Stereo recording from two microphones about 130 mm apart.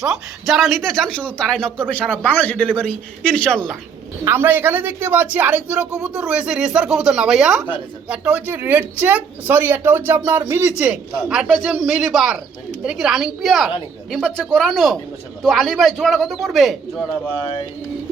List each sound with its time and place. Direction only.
0.0 s speech: centre (ahead or behind)
4.2 s a woman's voice: 20° right (ahead or behind)
11.3 s speech: 5° right (ahead or behind)
17.4 s speech: 40° left (ahead or behind)